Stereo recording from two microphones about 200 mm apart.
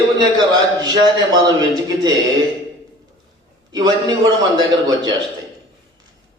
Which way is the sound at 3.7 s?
20° right (ahead or behind).